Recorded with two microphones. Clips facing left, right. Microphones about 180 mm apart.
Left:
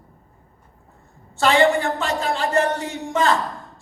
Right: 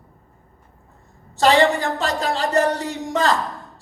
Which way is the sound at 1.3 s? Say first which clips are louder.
Right 1 dB; 35° right (ahead or behind).